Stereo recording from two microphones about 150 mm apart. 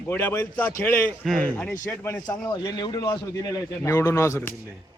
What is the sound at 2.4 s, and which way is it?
A man's voice, 25° left (ahead or behind).